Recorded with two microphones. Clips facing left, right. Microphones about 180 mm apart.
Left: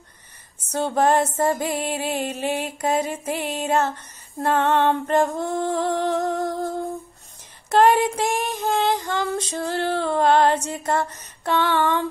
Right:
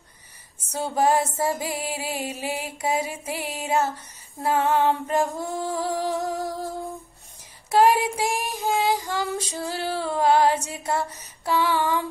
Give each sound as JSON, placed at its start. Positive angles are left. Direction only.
{"t": 0.7, "sound": "female singing", "side_deg": -5}
{"t": 7.8, "sound": "female singing", "side_deg": -5}